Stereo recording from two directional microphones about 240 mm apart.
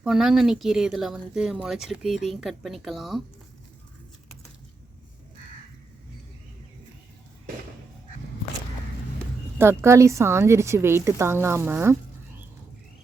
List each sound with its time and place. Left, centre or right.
0.0 s speech: centre
9.6 s a woman's voice: centre